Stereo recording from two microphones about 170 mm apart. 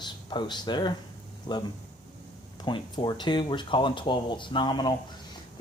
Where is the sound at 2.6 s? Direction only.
25° left (ahead or behind).